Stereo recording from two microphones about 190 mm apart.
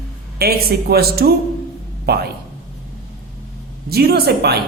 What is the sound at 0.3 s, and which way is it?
Speech, 55° right (ahead or behind).